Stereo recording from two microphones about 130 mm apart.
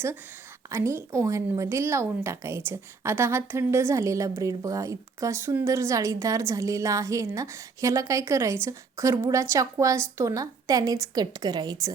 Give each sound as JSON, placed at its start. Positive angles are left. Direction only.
{"t": 0.7, "sound": "a woman's voice", "side_deg": -20}